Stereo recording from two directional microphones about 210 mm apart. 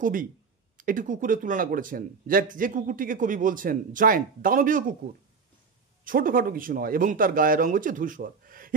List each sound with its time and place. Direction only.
0.0 s speech: 40° right (ahead or behind)
6.0 s speech: 40° right (ahead or behind)